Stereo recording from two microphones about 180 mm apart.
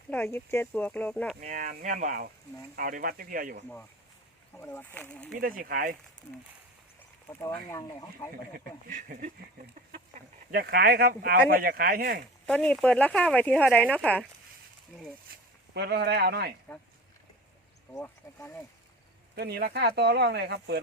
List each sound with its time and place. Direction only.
0.1 s speech: 10° left (ahead or behind)
1.4 s speech: 45° right (ahead or behind)
4.5 s speech: 10° left (ahead or behind)
5.4 s speech: 55° right (ahead or behind)
7.7 s speech: 15° left (ahead or behind)
8.9 s speech: 45° right (ahead or behind)
9.9 s speech: 60° right (ahead or behind)
12.5 s speech: 5° left (ahead or behind)
15.3 s speech: 55° right (ahead or behind)
15.7 s speech: 65° right (ahead or behind)
17.9 s speech: 15° left (ahead or behind)
19.4 s speech: 65° right (ahead or behind)